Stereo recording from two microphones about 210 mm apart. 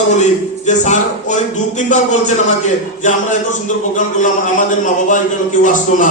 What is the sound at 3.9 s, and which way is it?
A man's voice, 35° left (ahead or behind).